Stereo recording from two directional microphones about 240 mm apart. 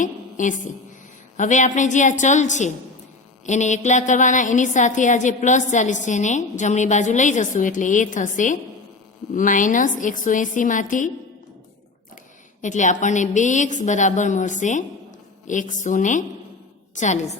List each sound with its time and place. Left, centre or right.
0.0 s a sound: left
1.4 s a woman's voice: left
12.6 s a woman's voice: left